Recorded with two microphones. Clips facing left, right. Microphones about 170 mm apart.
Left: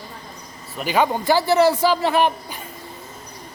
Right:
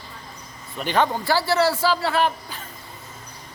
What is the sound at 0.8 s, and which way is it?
A man's voice, 10° left (ahead or behind).